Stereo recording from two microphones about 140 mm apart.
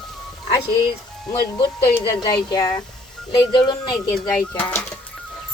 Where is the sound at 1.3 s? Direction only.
35° left (ahead or behind).